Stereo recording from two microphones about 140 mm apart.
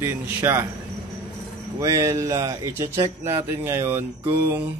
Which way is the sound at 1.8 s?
20° right (ahead or behind).